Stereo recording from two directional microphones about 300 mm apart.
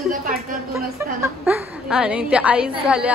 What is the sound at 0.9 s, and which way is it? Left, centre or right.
A woman's voice, centre.